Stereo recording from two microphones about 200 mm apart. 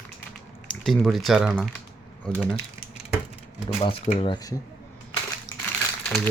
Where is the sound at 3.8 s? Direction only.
30° left (ahead or behind).